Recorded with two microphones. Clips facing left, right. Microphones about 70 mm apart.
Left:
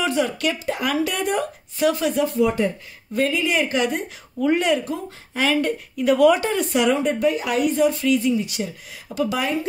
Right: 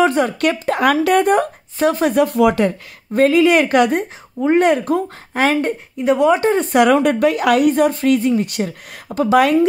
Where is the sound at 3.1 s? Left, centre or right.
Right.